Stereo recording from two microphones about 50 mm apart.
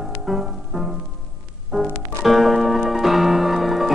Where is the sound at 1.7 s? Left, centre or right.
Centre.